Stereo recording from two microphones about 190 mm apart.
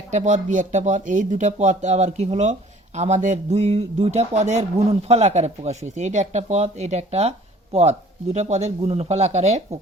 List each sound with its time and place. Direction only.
0.1 s speech: 40° right (ahead or behind)